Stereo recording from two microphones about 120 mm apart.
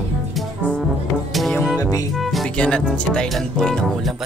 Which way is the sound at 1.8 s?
30° left (ahead or behind).